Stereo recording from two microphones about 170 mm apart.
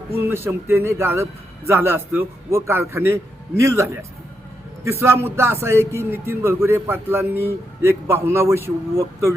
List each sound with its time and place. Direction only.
0.3 s a man's voice: 15° right (ahead or behind)
4.9 s a man's voice: 15° right (ahead or behind)